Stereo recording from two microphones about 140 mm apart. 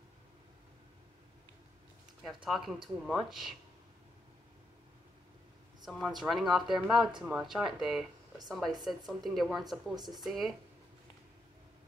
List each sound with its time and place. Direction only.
2.2 s speech: centre (ahead or behind)
5.9 s speech: centre (ahead or behind)
9.9 s speech: 30° right (ahead or behind)
10.2 s speech: centre (ahead or behind)